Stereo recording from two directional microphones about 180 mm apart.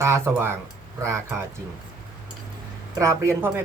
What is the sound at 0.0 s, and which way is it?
Speech, 15° right (ahead or behind).